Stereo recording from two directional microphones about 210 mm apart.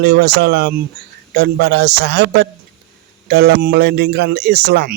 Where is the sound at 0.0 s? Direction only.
50° right (ahead or behind).